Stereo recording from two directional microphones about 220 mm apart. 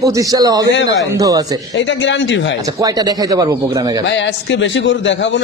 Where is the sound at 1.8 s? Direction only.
55° left (ahead or behind).